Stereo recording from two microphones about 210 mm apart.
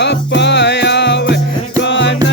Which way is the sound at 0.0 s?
55° left (ahead or behind).